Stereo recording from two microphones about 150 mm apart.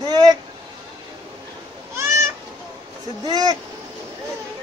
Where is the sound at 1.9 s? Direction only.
20° right (ahead or behind).